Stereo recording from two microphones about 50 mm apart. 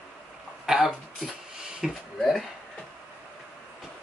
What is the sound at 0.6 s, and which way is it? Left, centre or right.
Throat clearing, centre.